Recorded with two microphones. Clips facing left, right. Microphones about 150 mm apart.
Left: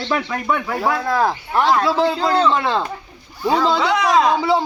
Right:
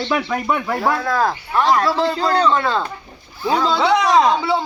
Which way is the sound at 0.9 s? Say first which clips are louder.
Left 1 dB; 20° left (ahead or behind).